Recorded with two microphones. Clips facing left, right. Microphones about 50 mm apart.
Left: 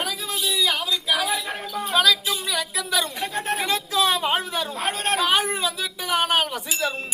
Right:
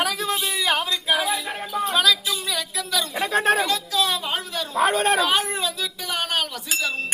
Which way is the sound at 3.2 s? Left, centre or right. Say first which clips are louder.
Right 7 dB; right.